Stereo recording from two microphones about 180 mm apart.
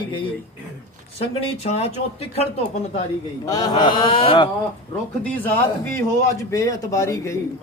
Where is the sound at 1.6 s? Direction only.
35° left (ahead or behind).